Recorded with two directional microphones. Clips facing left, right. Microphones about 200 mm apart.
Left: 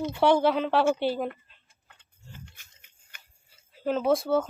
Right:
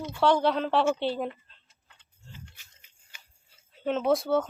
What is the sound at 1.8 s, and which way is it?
Tick-tock, 55° left (ahead or behind).